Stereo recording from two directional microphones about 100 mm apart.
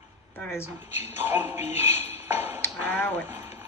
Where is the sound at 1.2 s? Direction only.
20° right (ahead or behind).